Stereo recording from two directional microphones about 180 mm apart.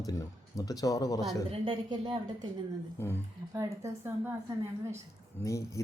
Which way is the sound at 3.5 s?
15° right (ahead or behind).